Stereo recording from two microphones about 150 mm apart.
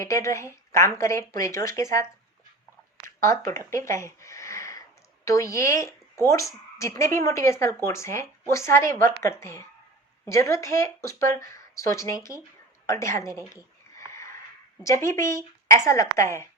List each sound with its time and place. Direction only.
0.0 s speech: 20° left (ahead or behind)
3.2 s speech: 20° left (ahead or behind)
14.8 s speech: 20° left (ahead or behind)